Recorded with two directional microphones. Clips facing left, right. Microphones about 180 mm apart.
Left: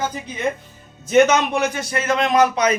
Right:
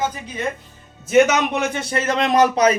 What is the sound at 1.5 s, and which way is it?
Speech, 25° right (ahead or behind).